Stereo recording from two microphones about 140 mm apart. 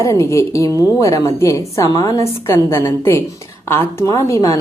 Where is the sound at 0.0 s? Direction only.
20° left (ahead or behind).